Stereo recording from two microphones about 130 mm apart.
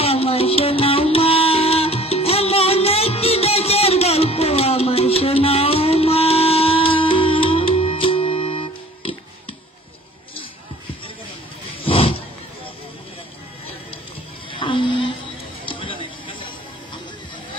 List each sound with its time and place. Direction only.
0.0 s music: 50° left (ahead or behind)
11.8 s roaring cats: 45° left (ahead or behind)
14.5 s a sound: 40° left (ahead or behind)